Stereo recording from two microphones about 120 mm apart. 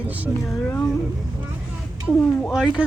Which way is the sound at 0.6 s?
10° left (ahead or behind).